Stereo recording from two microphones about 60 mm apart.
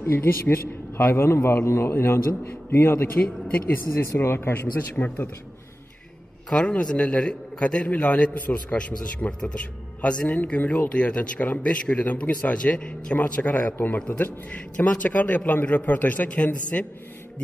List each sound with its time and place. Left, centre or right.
0.0 s a man's voice: left
4.0 s speech: left
6.5 s speech: centre